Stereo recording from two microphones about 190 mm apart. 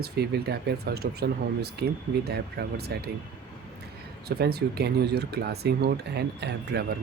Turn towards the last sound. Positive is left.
turn(degrees=-60)  # may be behind; listen again after turning